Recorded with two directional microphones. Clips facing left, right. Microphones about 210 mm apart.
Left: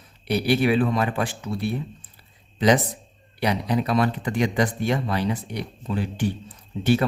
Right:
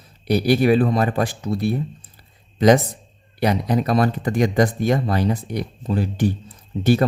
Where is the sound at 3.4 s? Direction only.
45° right (ahead or behind).